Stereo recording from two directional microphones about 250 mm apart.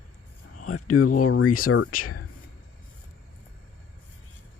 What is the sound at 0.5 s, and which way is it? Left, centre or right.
Speech, left.